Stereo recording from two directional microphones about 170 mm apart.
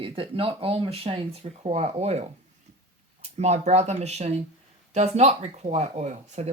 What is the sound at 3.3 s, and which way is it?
Speech, 40° right (ahead or behind).